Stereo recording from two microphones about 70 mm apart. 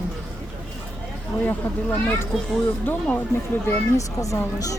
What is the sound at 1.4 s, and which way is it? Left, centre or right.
Speech, left.